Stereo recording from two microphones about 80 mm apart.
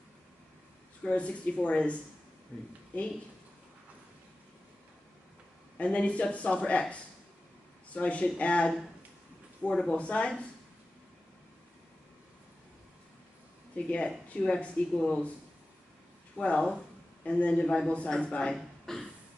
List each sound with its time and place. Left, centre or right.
1.0 s speech: centre
5.8 s speech: centre
13.7 s speech: centre
16.3 s speech: centre